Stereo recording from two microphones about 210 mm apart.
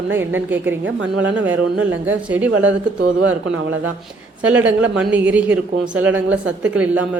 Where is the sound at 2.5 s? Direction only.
65° right (ahead or behind).